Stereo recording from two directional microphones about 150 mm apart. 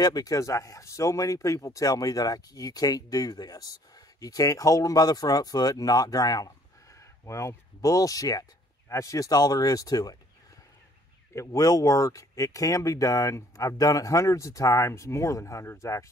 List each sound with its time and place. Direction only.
0.0 s speech: 25° left (ahead or behind)
11.3 s speech: 20° left (ahead or behind)